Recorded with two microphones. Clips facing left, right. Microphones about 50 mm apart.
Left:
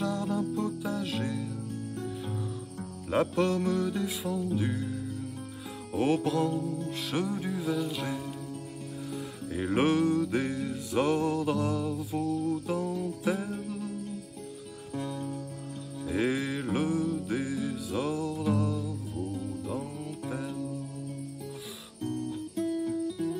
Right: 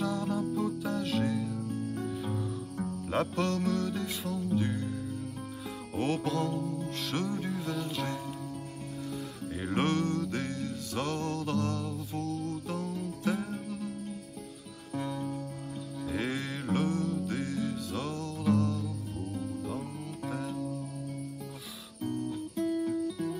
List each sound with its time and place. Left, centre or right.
0.0 s music: centre
15.0 s music: centre
22.0 s music: centre